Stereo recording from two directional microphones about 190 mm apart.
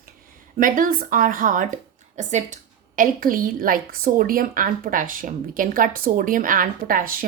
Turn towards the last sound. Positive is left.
turn(degrees=-50)  # may be behind; listen again after turning